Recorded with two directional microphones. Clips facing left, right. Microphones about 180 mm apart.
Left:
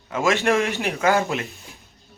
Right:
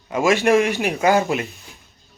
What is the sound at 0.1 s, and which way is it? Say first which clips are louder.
Speech: right 4 dB; 15° right (ahead or behind).